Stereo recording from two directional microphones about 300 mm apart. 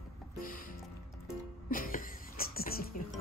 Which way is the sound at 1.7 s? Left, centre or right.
Left.